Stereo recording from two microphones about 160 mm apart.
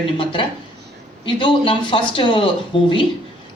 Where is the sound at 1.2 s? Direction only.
30° left (ahead or behind).